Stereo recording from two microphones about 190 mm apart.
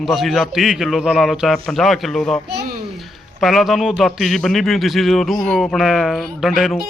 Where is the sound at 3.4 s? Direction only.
Centre (ahead or behind).